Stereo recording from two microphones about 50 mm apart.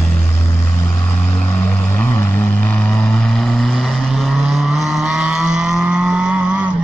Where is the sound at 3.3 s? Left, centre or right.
Centre.